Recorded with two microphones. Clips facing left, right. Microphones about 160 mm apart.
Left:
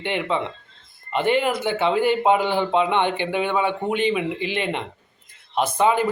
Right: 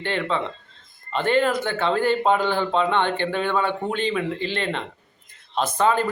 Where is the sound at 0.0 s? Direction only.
15° left (ahead or behind).